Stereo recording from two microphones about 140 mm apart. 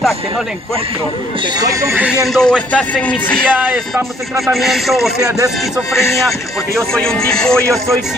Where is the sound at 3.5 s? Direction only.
15° right (ahead or behind).